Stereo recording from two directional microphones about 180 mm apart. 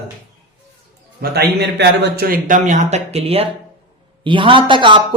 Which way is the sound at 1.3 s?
65° right (ahead or behind).